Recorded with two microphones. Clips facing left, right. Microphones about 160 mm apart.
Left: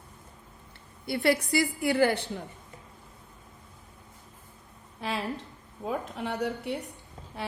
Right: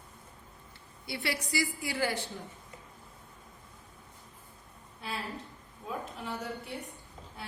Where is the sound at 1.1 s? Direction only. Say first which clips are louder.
Left 10 dB; 50° left (ahead or behind).